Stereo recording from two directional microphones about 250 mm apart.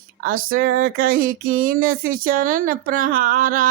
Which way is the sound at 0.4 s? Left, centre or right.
Right.